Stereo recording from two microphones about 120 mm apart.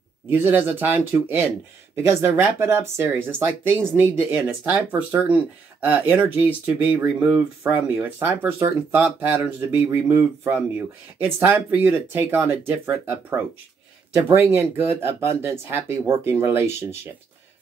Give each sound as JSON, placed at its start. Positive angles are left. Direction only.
{"t": 0.3, "sound": "speech", "side_deg": -15}